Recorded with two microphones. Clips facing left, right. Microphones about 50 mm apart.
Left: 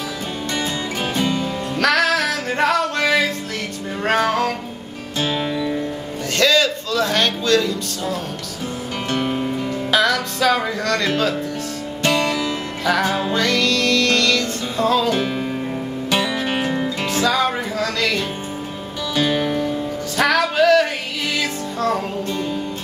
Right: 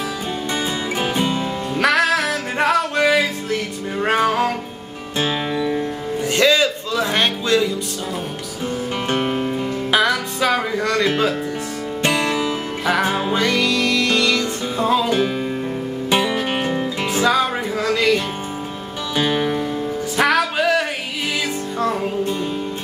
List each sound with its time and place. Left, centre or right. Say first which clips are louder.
0.6 s music: right 1 dB; centre
9.1 s music: even; right
9.8 s speech: even; centre
12.0 s music: even; right
15.1 s music: right 2 dB; centre
16.1 s music: right 2 dB; centre